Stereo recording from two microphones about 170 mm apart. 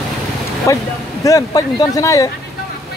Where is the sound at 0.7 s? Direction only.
20° left (ahead or behind).